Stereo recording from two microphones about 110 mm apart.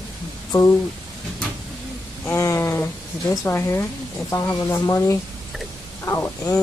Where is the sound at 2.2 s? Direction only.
25° left (ahead or behind).